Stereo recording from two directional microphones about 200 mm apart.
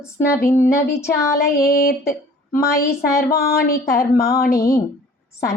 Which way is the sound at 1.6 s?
50° left (ahead or behind).